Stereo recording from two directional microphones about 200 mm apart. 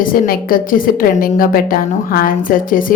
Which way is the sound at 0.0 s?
45° left (ahead or behind).